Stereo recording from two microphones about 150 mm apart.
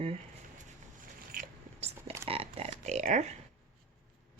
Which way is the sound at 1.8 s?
40° right (ahead or behind).